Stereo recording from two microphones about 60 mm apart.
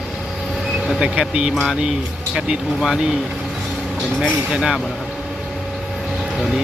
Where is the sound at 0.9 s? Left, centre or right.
Centre.